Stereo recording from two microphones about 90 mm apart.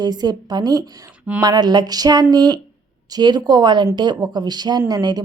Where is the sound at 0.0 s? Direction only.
50° right (ahead or behind).